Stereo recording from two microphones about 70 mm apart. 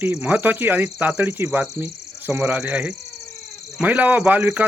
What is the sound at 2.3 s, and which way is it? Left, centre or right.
Speech, centre.